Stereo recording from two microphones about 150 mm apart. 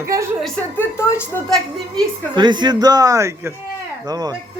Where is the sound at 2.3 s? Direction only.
30° right (ahead or behind).